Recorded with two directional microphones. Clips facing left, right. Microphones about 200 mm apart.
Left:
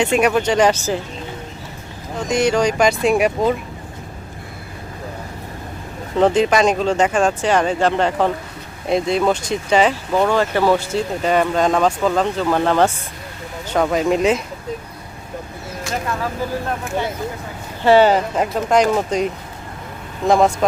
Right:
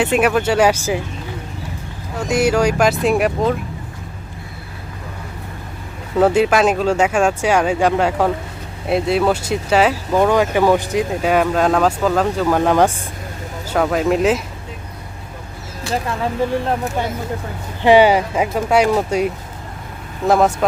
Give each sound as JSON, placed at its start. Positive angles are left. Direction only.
{"t": 0.0, "sound": "speech", "side_deg": -5}
{"t": 2.2, "sound": "speech", "side_deg": -5}
{"t": 6.1, "sound": "speech", "side_deg": -5}
{"t": 16.5, "sound": "speech", "side_deg": -30}
{"t": 17.8, "sound": "speech", "side_deg": -15}